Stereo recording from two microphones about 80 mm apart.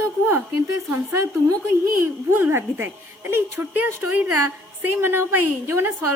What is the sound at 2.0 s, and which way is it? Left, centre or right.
A woman's voice, right.